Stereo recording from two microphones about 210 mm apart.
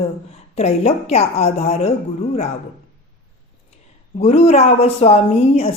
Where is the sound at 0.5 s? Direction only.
30° left (ahead or behind).